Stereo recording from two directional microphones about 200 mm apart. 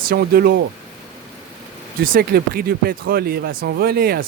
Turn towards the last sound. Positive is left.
turn(degrees=-50)  # may be behind; listen again after turning